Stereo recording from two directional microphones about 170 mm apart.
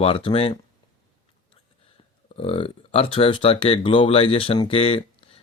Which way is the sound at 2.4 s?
35° left (ahead or behind).